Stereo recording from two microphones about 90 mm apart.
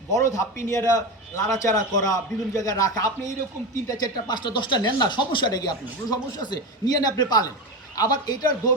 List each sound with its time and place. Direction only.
0.1 s a man's voice: 35° left (ahead or behind)
4.0 s speech: 55° left (ahead or behind)